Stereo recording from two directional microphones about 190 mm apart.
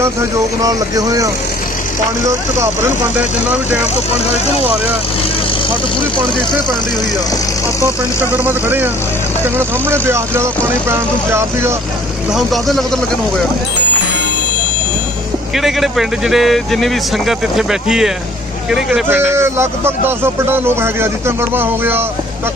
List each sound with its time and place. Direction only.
0.0 s a man's voice: 15° right (ahead or behind)
8.2 s a man's voice: 10° right (ahead or behind)
12.3 s speech: centre (ahead or behind)
15.5 s a man's voice: centre (ahead or behind)